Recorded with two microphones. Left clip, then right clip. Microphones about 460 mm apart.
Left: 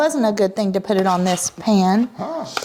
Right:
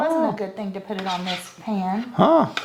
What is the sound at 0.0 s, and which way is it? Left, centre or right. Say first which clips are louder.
Speech: left 4 dB; left.